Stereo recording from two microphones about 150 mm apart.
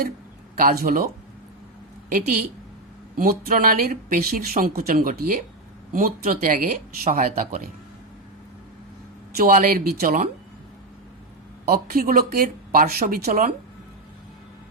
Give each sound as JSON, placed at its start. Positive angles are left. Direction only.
{"t": 0.5, "sound": "speech", "side_deg": -85}
{"t": 2.1, "sound": "speech", "side_deg": -75}
{"t": 9.3, "sound": "speech", "side_deg": -70}
{"t": 11.7, "sound": "speech", "side_deg": -85}